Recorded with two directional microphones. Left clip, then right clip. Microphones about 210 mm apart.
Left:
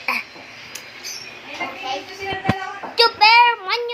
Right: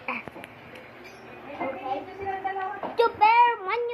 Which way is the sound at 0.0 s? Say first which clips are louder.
Left 10 dB; 20° left (ahead or behind).